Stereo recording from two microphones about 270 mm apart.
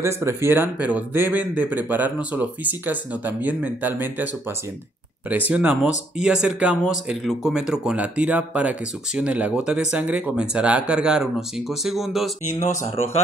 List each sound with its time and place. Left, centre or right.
0.0 s speech: centre
5.5 s speech: centre
12.4 s speech: left